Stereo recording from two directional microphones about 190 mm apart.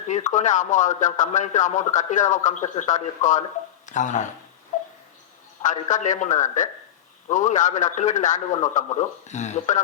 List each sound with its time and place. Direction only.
0.1 s a man's voice: 40° left (ahead or behind)
5.9 s a man's voice: 40° left (ahead or behind)